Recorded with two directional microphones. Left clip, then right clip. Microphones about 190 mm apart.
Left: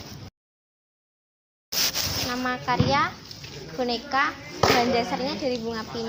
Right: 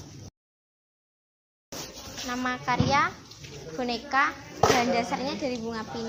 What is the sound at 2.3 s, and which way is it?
A woman's voice, 50° right (ahead or behind).